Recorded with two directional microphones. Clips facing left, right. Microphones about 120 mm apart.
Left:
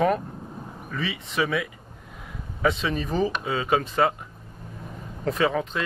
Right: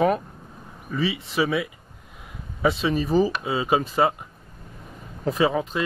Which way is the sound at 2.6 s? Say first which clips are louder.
Right 2 dB; 10° right (ahead or behind).